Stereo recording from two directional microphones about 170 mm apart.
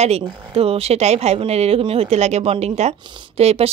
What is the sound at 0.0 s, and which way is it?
A woman's voice, 35° right (ahead or behind).